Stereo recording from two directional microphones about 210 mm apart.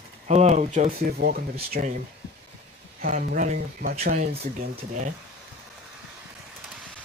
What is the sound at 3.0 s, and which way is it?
Speech, 40° right (ahead or behind).